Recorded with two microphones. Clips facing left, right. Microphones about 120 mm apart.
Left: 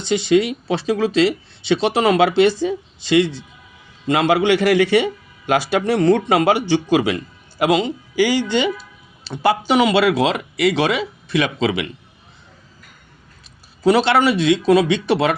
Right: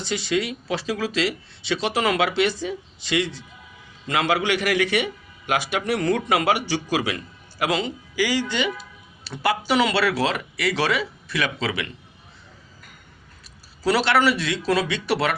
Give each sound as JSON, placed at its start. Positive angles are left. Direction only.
{"t": 0.0, "sound": "speech", "side_deg": 25}
{"t": 13.8, "sound": "speech", "side_deg": 20}